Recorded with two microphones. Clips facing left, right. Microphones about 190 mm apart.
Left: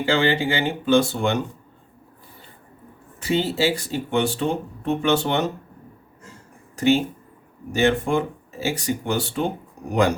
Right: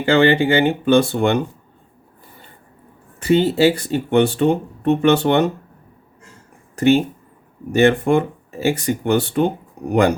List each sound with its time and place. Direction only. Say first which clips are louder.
0.0 s speech: right 6 dB; 60° right (ahead or behind)
3.2 s speech: right 7 dB; 60° right (ahead or behind)
6.7 s speech: right 4 dB; 60° right (ahead or behind)